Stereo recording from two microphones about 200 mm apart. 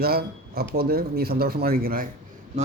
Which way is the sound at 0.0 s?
50° right (ahead or behind).